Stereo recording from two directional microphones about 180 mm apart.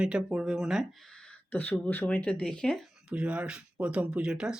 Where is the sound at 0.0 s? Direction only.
5° right (ahead or behind).